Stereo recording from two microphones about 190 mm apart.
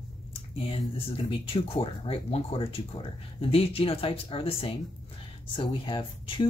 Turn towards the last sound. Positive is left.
turn(degrees=25)  # may be behind; listen again after turning